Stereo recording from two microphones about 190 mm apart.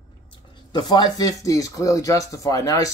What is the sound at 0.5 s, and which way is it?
Speech, 25° left (ahead or behind).